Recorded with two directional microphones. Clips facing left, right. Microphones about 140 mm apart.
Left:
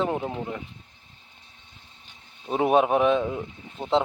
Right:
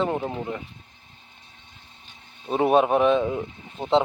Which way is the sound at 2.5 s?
10° left (ahead or behind).